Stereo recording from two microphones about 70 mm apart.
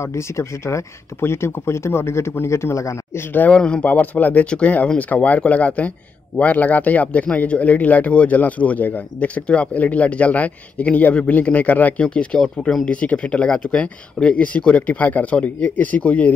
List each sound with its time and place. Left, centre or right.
0.0 s speech: left
3.5 s speech: centre